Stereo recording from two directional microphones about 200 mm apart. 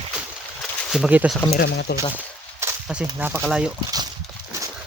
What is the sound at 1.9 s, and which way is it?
Speech, 55° left (ahead or behind).